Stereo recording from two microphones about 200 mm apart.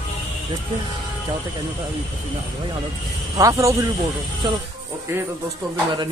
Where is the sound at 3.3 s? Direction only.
15° right (ahead or behind).